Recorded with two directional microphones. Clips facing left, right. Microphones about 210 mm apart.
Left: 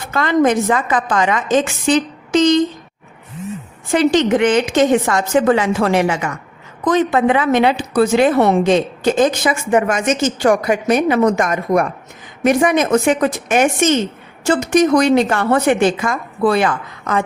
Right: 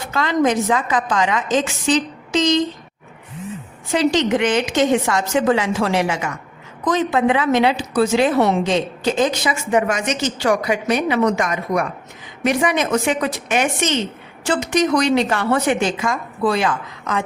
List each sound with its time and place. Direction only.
0.1 s a woman's voice: 50° left (ahead or behind)
3.9 s a woman's voice: 50° left (ahead or behind)